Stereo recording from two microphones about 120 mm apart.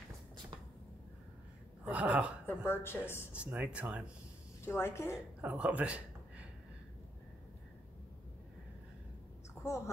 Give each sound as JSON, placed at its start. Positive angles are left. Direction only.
{"t": 1.9, "sound": "speech", "side_deg": -10}
{"t": 2.4, "sound": "a woman's voice", "side_deg": 20}
{"t": 3.3, "sound": "speech", "side_deg": -10}
{"t": 4.6, "sound": "a woman's voice", "side_deg": 20}
{"t": 5.4, "sound": "a man's voice", "side_deg": -10}
{"t": 9.6, "sound": "a sound", "side_deg": 25}